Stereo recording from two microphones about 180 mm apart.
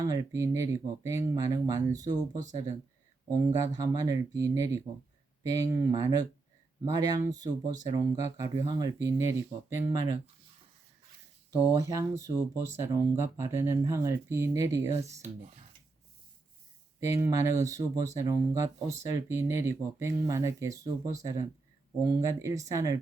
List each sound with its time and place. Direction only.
0.0 s speech: 20° right (ahead or behind)
3.7 s speech: 20° right (ahead or behind)
11.7 s speech: 20° right (ahead or behind)
17.0 s speech: 15° right (ahead or behind)